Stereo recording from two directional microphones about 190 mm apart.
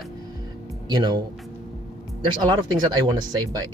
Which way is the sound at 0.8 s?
20° right (ahead or behind).